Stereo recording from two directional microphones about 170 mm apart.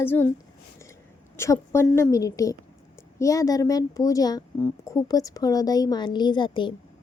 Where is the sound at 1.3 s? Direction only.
15° left (ahead or behind).